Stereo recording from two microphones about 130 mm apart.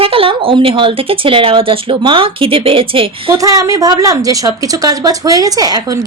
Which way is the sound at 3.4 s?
25° right (ahead or behind).